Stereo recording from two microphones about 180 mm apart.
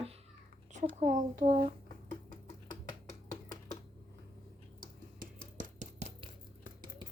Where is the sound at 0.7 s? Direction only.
40° right (ahead or behind).